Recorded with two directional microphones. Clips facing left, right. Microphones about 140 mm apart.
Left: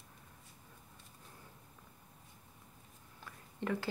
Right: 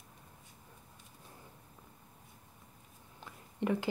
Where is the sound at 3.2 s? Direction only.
20° right (ahead or behind).